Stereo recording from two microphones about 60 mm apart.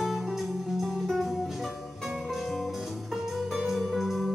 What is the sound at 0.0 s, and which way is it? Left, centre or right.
Music, centre.